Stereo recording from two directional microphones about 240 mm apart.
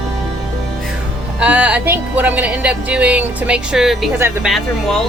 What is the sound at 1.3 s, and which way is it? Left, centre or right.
Speech, centre.